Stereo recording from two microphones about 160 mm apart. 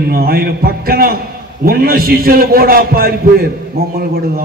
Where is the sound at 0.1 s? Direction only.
70° right (ahead or behind).